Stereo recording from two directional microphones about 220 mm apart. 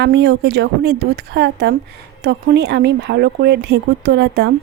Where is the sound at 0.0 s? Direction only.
50° right (ahead or behind).